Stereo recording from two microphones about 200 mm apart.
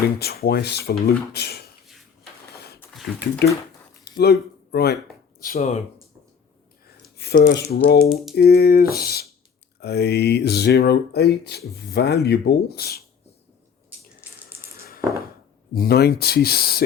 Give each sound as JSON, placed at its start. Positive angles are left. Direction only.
{"t": 0.2, "sound": "speech", "side_deg": 50}
{"t": 2.9, "sound": "speech", "side_deg": 0}
{"t": 4.2, "sound": "speech", "side_deg": 55}
{"t": 5.4, "sound": "speech", "side_deg": 40}
{"t": 7.2, "sound": "speech", "side_deg": 50}
{"t": 14.8, "sound": "a sound", "side_deg": 50}
{"t": 15.7, "sound": "speech", "side_deg": 50}